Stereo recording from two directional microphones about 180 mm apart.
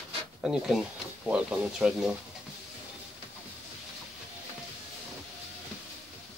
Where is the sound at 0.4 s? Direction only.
5° right (ahead or behind).